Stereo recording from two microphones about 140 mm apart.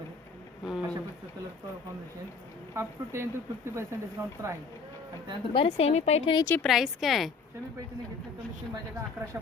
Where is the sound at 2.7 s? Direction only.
20° right (ahead or behind).